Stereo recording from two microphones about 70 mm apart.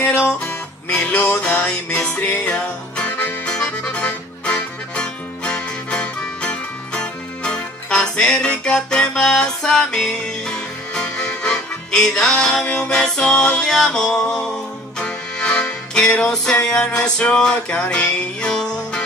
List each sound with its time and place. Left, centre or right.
0.0 s music: left